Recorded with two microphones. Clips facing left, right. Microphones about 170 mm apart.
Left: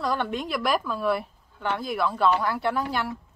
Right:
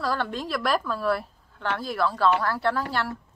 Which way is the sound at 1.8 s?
15° left (ahead or behind).